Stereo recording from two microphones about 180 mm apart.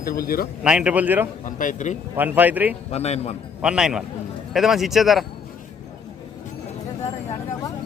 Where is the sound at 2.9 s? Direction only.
35° left (ahead or behind).